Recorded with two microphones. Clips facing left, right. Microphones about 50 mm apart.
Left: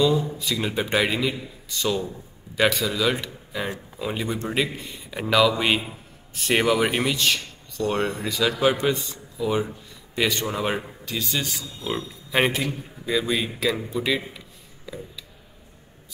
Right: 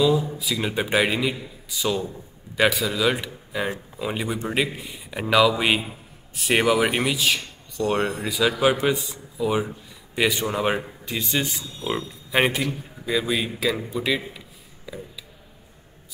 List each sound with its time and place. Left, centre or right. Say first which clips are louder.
0.0 s a man's voice: right 1 dB; centre
11.1 s a man's voice: right 2 dB; right; by 14.4 s centre